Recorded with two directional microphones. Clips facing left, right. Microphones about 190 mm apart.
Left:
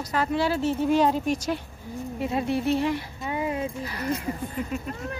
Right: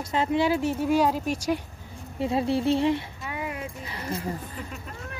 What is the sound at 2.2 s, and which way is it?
Speech, 25° right (ahead or behind).